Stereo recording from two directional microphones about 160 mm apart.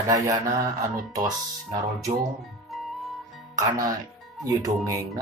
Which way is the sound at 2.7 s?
Centre (ahead or behind).